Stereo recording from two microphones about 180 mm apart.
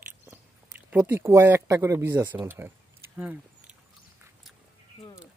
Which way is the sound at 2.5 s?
10° right (ahead or behind).